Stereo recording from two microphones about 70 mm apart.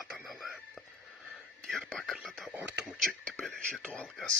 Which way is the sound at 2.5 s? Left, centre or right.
Right.